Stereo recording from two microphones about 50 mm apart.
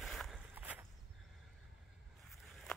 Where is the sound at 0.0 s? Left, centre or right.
Centre.